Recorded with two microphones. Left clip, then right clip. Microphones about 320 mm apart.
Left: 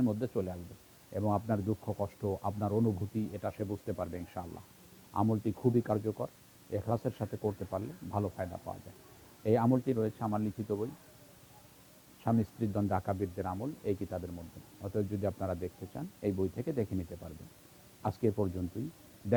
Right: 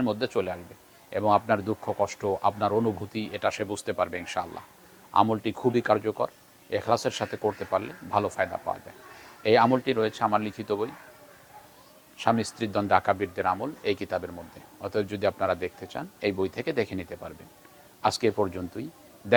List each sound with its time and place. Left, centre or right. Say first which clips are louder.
0.2 s speech: right 8 dB; centre
3.2 s speech: right 9 dB; centre
12.2 s speech: right 9 dB; centre
18.0 s speech: right 9 dB; centre